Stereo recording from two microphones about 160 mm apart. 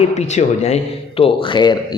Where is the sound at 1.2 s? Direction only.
30° left (ahead or behind).